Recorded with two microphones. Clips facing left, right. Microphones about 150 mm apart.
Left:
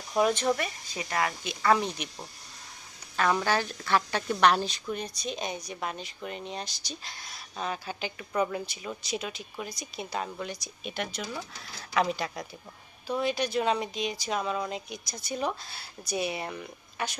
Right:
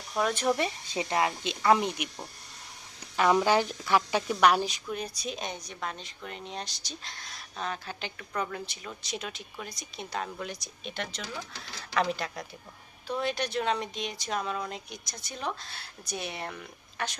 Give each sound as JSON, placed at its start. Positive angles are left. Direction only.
{"t": 0.1, "sound": "speech", "side_deg": 10}
{"t": 0.5, "sound": "a woman's voice", "side_deg": -25}
{"t": 3.2, "sound": "a woman's voice", "side_deg": -15}